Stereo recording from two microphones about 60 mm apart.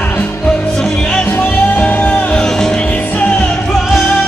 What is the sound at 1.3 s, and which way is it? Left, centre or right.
Music, left.